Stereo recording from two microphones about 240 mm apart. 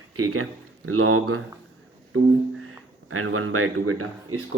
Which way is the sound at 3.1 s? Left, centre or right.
Right.